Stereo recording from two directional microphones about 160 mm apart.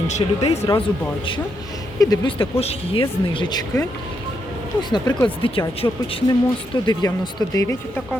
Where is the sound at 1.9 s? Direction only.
20° left (ahead or behind).